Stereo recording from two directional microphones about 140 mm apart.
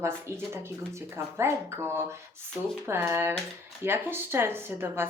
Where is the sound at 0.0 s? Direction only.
20° right (ahead or behind).